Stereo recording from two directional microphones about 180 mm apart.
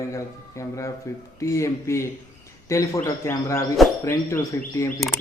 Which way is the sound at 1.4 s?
15° left (ahead or behind).